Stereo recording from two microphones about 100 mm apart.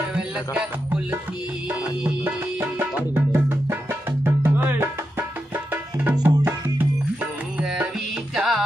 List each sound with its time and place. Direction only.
1.7 s music: 15° right (ahead or behind)
5.7 s tabla: 20° right (ahead or behind)
6.2 s music: 20° right (ahead or behind)
7.5 s music: 10° right (ahead or behind)